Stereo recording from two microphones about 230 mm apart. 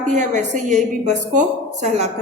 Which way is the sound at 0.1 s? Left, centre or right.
Right.